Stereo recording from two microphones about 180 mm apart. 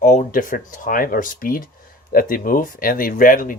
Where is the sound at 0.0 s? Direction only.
45° left (ahead or behind).